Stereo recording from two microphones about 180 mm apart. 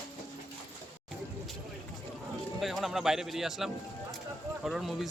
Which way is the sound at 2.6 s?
Centre (ahead or behind).